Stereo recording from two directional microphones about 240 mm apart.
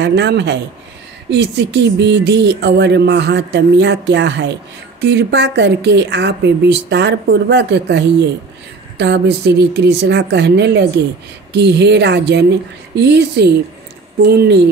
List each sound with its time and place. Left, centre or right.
0.0 s a woman's voice: right